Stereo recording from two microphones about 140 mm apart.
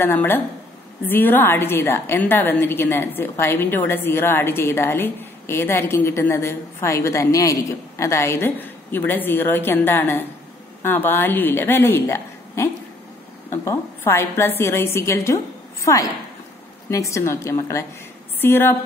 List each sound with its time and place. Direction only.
0.0 s a woman's voice: 15° left (ahead or behind)
17.1 s a woman's voice: 20° left (ahead or behind)